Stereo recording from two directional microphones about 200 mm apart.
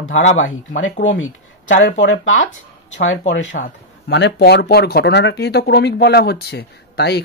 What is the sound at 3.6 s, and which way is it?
Speech, 55° left (ahead or behind).